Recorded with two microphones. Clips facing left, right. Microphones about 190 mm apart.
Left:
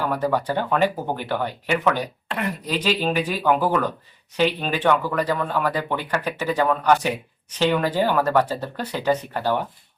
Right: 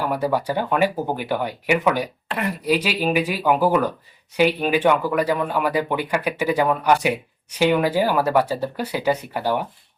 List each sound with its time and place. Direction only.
0.0 s speech: 10° right (ahead or behind)